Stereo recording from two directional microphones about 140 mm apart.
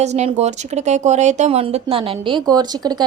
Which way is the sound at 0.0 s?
55° right (ahead or behind).